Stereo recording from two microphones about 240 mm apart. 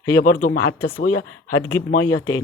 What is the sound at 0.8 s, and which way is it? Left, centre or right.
Speech, left.